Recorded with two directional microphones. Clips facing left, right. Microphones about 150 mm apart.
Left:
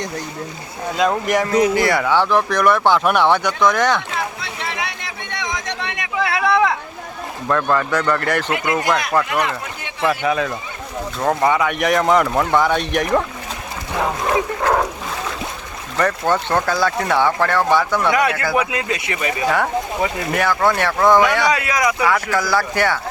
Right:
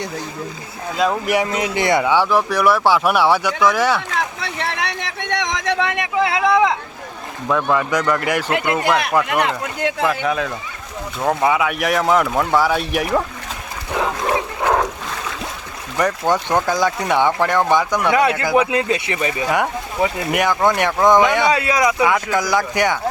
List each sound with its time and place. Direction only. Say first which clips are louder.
0.9 s speech: even; centre (ahead or behind)
1.5 s speech: left 3 dB; 20° right (ahead or behind)
4.4 s a sound: right 2 dB; 65° right (ahead or behind); by 5.9 s 85° right
6.2 s a sound: even; 20° right (ahead or behind)
7.4 s speech: even; 5° right (ahead or behind)
10.0 s speech: left 4 dB; centre (ahead or behind)
16.0 s speech: even; 10° right (ahead or behind); by 19.3 s 30° right (ahead or behind)
19.5 s speech: left 1 dB; 15° right (ahead or behind)